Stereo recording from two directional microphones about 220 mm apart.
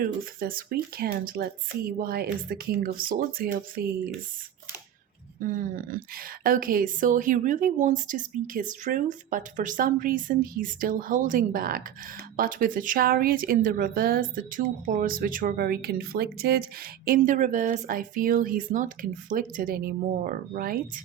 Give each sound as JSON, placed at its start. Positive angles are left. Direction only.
{"t": 0.0, "sound": "speech", "side_deg": -40}
{"t": 5.4, "sound": "speech", "side_deg": -40}